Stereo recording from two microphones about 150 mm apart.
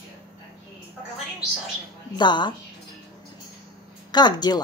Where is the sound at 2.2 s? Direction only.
30° left (ahead or behind).